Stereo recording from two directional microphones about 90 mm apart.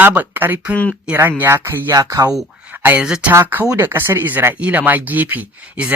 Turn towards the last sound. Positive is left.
turn(degrees=-15)  # may be behind; listen again after turning